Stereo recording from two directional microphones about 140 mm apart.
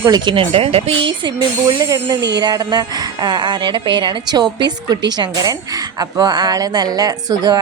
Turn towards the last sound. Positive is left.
turn(degrees=-30)  # may be behind; listen again after turning